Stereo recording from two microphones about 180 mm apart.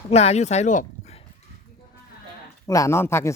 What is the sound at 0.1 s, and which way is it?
Speech, 35° left (ahead or behind).